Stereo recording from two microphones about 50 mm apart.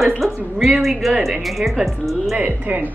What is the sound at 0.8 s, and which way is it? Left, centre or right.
Speech, centre.